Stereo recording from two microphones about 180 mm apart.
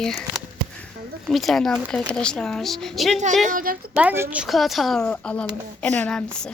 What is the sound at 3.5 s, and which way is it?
Speech, 50° right (ahead or behind).